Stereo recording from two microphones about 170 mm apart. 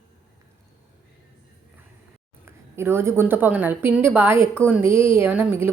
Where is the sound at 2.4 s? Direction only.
15° right (ahead or behind).